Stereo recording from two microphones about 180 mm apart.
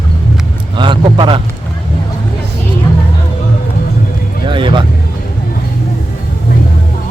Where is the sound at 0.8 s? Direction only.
25° right (ahead or behind).